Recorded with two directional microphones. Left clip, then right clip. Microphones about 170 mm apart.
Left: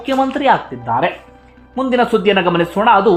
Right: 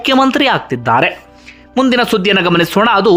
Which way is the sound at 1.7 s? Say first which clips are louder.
Right 2 dB; 25° right (ahead or behind).